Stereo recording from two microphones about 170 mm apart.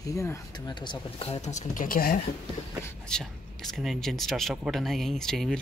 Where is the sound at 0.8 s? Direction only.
30° left (ahead or behind); by 2.1 s 55° left (ahead or behind).